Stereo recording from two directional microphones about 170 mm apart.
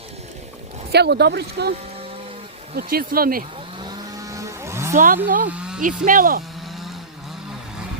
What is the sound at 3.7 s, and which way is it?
Vehicle, 25° right (ahead or behind).